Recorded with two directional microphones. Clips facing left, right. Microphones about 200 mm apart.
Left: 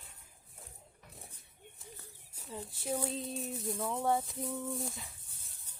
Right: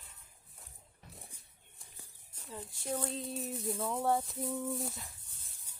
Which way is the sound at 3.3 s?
Centre (ahead or behind).